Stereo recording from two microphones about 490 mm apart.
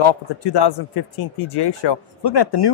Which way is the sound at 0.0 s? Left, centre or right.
Left.